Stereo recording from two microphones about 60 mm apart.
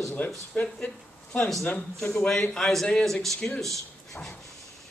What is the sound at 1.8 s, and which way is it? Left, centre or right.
Speech, centre.